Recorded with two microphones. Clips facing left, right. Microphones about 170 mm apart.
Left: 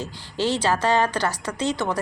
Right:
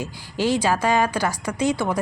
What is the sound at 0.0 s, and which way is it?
A woman's voice, 10° right (ahead or behind).